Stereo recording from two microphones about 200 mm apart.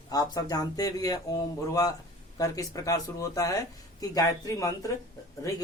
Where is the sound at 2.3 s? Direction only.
15° left (ahead or behind).